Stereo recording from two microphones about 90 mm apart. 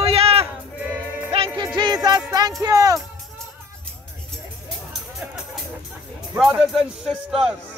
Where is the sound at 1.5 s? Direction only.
55° right (ahead or behind).